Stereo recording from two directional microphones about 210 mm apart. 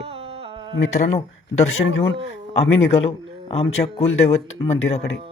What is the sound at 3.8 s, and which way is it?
Speech, 30° left (ahead or behind).